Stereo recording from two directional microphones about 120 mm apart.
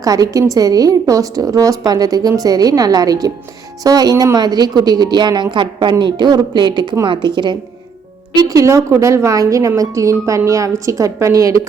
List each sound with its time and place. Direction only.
0.0 s a woman's voice: 30° right (ahead or behind)